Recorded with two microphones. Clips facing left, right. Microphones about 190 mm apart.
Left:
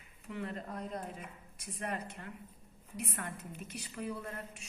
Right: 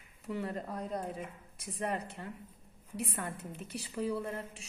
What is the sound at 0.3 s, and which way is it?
A woman's voice, 35° right (ahead or behind).